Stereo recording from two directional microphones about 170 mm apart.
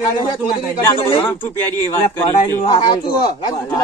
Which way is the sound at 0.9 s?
30° left (ahead or behind).